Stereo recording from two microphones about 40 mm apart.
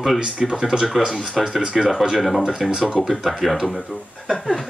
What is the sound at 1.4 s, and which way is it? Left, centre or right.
Speech, centre.